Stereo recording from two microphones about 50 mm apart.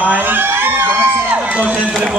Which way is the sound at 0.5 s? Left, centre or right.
Right.